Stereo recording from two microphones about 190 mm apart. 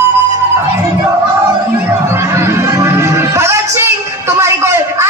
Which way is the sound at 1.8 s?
15° right (ahead or behind).